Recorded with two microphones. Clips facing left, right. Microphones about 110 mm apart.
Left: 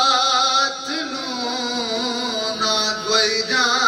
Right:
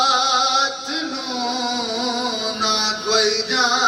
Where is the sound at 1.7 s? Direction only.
55° left (ahead or behind).